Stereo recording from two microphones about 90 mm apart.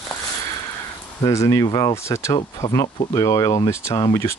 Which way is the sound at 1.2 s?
35° left (ahead or behind).